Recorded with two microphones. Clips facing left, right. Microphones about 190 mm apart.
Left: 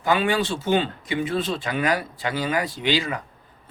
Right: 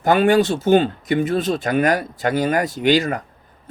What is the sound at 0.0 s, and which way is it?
Speech, 45° right (ahead or behind).